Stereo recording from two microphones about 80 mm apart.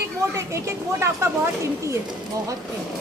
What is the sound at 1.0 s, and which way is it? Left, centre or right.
A woman's voice, right.